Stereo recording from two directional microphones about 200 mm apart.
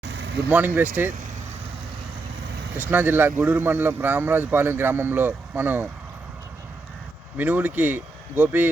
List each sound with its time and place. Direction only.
0.0 s vehicle: 60° right (ahead or behind)
0.4 s speech: 10° right (ahead or behind)
2.7 s speech: 10° right (ahead or behind)
7.3 s speech: 10° right (ahead or behind)